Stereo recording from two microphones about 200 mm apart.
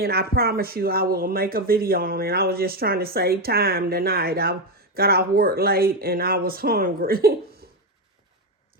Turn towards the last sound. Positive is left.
turn(degrees=-45)  # may be behind; listen again after turning